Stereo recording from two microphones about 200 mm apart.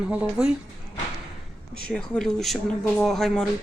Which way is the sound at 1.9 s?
5° left (ahead or behind).